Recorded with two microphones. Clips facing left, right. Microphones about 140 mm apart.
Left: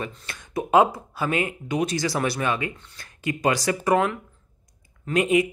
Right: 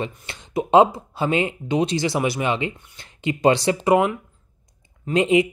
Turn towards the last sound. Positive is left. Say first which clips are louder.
# right 3 dB
turn(degrees=-25)  # may be behind; listen again after turning